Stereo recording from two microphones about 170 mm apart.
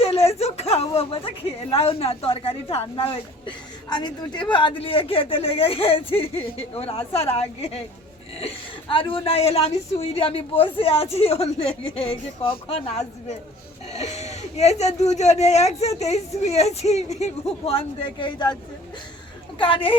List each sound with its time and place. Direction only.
0.0 s a sound: 35° left (ahead or behind)
1.7 s a woman's voice: 35° left (ahead or behind)
19.5 s speech: 30° left (ahead or behind)